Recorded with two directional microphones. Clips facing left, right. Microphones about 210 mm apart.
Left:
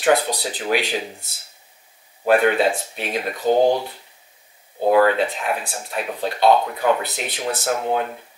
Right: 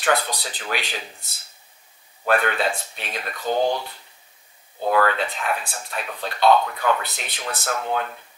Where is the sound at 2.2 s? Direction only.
10° left (ahead or behind).